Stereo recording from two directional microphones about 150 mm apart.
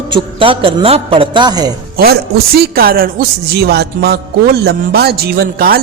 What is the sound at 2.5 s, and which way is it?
Speech, 90° right.